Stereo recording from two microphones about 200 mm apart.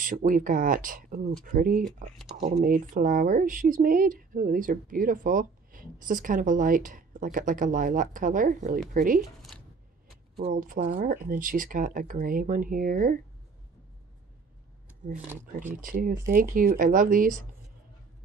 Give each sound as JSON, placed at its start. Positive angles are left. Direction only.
{"t": 0.0, "sound": "speech", "side_deg": -45}
{"t": 10.5, "sound": "speech", "side_deg": -45}
{"t": 15.8, "sound": "speech", "side_deg": -45}